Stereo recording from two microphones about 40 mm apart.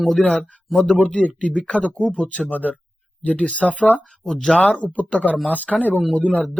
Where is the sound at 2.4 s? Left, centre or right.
Left.